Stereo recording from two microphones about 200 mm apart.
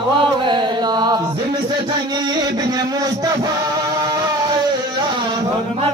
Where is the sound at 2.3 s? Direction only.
20° right (ahead or behind).